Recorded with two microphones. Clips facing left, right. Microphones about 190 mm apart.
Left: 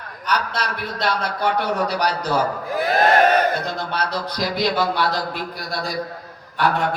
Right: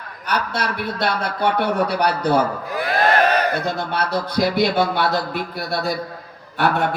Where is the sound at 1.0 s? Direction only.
55° right (ahead or behind).